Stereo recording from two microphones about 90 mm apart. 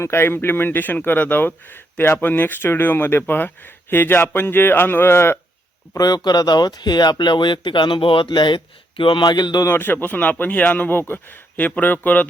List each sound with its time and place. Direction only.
0.0 s speech: 25° left (ahead or behind)
6.0 s speech: 45° left (ahead or behind)
9.6 s speech: 25° left (ahead or behind)